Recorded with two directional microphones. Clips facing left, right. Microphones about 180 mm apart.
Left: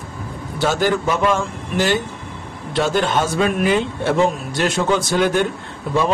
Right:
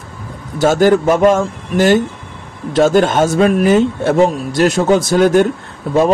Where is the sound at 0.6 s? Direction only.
45° right (ahead or behind).